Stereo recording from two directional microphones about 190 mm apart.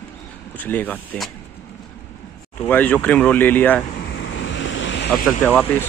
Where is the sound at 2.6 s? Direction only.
10° left (ahead or behind).